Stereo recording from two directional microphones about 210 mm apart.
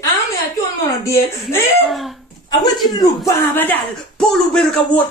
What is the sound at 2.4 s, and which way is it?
Speech, 20° left (ahead or behind).